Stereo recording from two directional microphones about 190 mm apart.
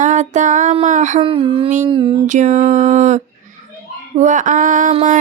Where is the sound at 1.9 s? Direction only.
30° right (ahead or behind).